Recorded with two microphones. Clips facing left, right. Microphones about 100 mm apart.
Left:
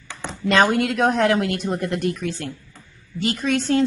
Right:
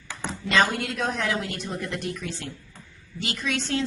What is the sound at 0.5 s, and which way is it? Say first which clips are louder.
A woman's voice: left 6 dB; 55° left (ahead or behind).